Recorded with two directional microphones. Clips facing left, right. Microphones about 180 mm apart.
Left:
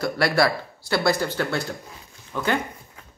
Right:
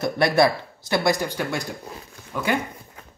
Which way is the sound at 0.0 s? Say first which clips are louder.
Right 2 dB; 20° right (ahead or behind).